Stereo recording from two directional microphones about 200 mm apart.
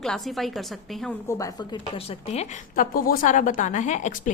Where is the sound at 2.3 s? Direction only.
40° left (ahead or behind).